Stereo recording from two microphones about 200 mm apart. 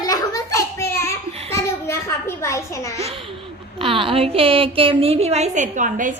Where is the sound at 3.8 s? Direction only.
25° right (ahead or behind).